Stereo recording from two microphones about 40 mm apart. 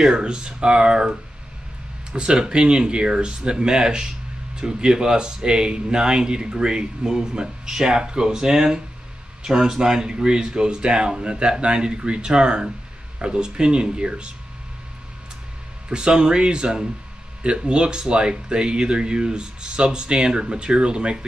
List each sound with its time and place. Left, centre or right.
0.0 s speech: right
2.1 s speech: right
15.9 s speech: right